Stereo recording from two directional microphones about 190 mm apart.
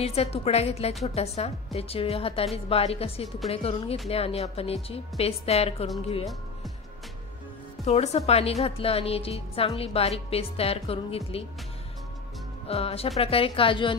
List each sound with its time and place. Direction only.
0.0 s a woman's voice: 35° left (ahead or behind)
7.8 s a woman's voice: 35° left (ahead or behind)
12.6 s a woman's voice: 30° left (ahead or behind)